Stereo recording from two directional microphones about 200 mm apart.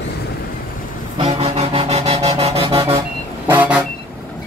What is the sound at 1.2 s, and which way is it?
Music, 30° right (ahead or behind).